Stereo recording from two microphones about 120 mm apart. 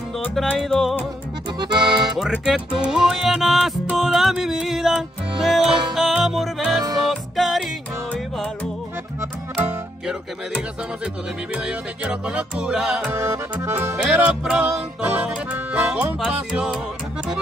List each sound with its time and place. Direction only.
0.3 s music: centre (ahead or behind)
1.6 s accordion: 40° right (ahead or behind)
2.4 s music: 5° right (ahead or behind)
9.2 s accordion: 15° right (ahead or behind)
11.5 s music: 10° right (ahead or behind)
13.1 s accordion: 20° right (ahead or behind)
14.4 s music: 5° right (ahead or behind)